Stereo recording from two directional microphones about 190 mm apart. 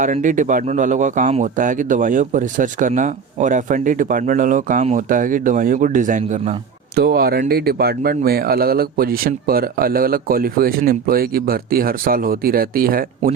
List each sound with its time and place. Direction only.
0.0 s speech: 40° right (ahead or behind)
6.9 s speech: 55° right (ahead or behind)